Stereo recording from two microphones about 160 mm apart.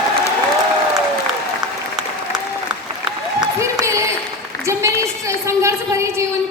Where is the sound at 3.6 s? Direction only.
20° right (ahead or behind).